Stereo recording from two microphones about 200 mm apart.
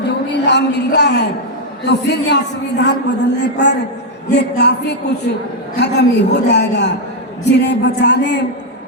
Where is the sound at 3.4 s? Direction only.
60° left (ahead or behind).